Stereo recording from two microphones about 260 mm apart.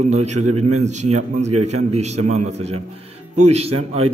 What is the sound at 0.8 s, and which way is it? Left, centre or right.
A man's voice, right.